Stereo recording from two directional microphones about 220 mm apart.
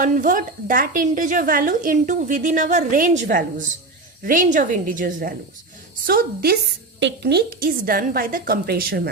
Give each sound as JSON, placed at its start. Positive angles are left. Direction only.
{"t": 0.0, "sound": "a woman's voice", "side_deg": -35}